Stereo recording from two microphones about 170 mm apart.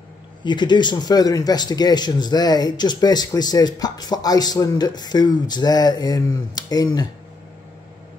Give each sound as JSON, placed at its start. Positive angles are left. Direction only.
{"t": 0.4, "sound": "speech", "side_deg": 25}